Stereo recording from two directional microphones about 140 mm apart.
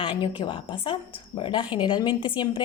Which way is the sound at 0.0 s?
40° left (ahead or behind).